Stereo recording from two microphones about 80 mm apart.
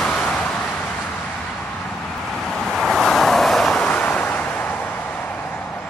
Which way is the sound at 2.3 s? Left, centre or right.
Centre.